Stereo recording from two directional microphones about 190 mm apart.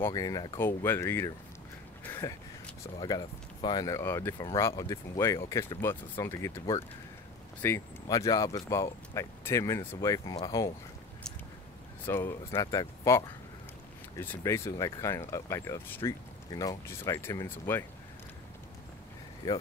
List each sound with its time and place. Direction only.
0.0 s speech: 20° left (ahead or behind)
7.6 s speech: 15° left (ahead or behind)
12.1 s speech: 15° left (ahead or behind)